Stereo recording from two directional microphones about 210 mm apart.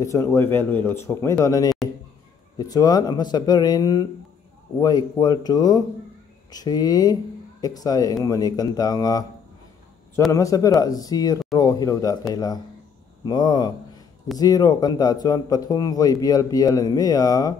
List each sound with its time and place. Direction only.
0.0 s speech: 15° left (ahead or behind)
10.3 s speech: 15° left (ahead or behind)